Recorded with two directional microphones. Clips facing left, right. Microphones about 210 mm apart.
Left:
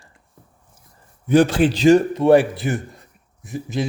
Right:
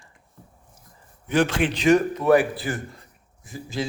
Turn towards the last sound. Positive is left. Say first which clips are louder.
# left 5 dB
turn(degrees=20)  # may be behind; listen again after turning